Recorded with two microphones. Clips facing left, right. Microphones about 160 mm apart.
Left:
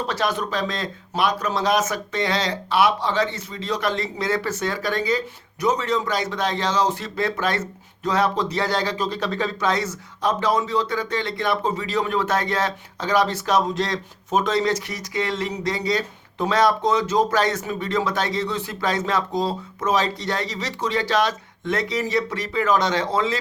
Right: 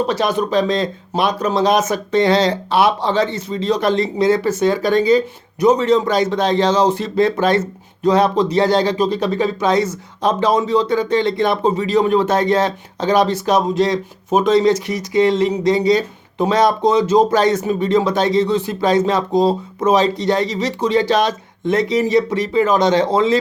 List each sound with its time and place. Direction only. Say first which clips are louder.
0.0 s speech: right 7 dB; 15° right (ahead or behind)